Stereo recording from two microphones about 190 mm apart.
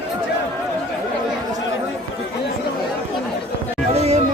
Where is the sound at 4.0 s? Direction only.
35° right (ahead or behind).